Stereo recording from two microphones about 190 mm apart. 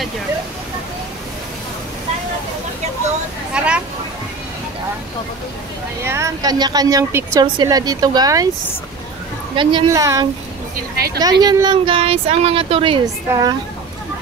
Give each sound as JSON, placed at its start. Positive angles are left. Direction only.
{"t": 3.6, "sound": "speech", "side_deg": -5}
{"t": 6.0, "sound": "a woman's voice", "side_deg": -15}
{"t": 9.6, "sound": "a woman's voice", "side_deg": -25}